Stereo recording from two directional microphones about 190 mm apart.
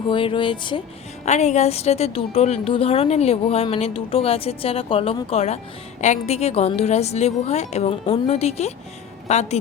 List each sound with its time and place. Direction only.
0.1 s speech: 25° left (ahead or behind)
1.2 s a woman's voice: 35° left (ahead or behind)